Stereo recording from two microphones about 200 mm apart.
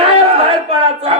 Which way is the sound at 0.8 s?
30° right (ahead or behind).